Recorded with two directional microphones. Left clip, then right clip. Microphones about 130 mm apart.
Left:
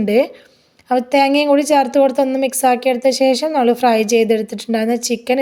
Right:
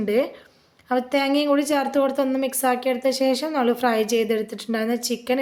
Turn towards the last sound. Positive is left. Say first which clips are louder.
# left 7 dB
turn(degrees=35)  # may be behind; listen again after turning